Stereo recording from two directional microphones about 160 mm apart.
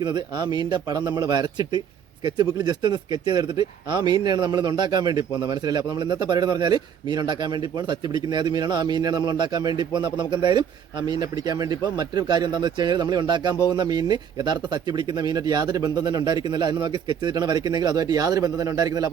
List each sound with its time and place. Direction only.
0.0 s a man's voice: 25° right (ahead or behind)